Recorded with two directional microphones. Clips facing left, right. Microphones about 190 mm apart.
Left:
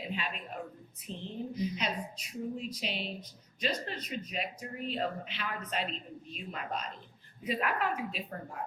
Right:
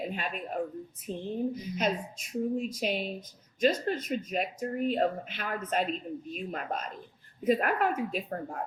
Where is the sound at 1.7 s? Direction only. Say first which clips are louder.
Right 6 dB; 45° right (ahead or behind).